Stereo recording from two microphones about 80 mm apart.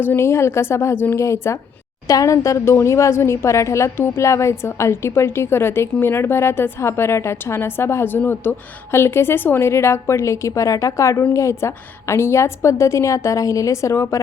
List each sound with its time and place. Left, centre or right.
0.0 s a woman's voice: left